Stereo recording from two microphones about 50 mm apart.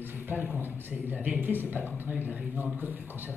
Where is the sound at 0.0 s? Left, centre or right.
Right.